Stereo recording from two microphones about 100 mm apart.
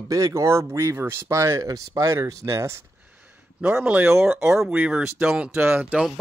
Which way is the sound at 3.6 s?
10° right (ahead or behind).